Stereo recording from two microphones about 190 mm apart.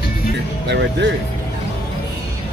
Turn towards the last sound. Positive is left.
turn(degrees=-65)  # may be behind; listen again after turning